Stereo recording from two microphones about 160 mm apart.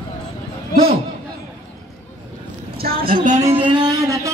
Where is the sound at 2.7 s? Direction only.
75° right (ahead or behind).